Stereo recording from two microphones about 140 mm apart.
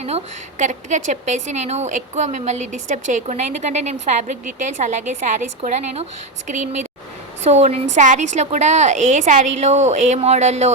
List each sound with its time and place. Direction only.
0.6 s a woman's voice: 60° right (ahead or behind)